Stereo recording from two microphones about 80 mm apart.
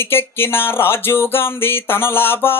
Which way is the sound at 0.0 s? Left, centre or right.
Left.